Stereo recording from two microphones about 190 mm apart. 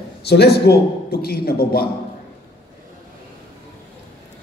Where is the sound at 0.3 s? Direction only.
60° left (ahead or behind).